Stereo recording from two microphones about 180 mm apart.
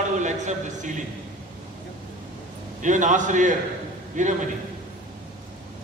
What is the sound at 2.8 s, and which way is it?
A man's voice, 45° right (ahead or behind).